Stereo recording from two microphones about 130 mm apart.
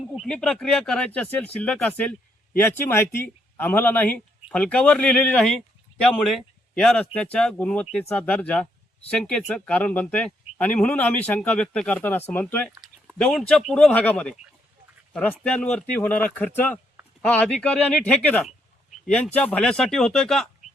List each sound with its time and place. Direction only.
0.2 s speech: 5° left (ahead or behind)
12.8 s speech: centre (ahead or behind)